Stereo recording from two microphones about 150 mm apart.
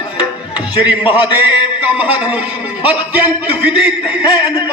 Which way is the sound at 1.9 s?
10° right (ahead or behind).